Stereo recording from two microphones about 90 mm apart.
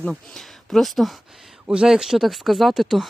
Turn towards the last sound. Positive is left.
turn(degrees=0)  # may be behind; listen again after turning